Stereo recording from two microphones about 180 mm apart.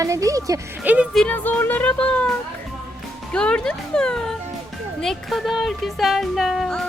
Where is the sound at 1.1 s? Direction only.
10° left (ahead or behind).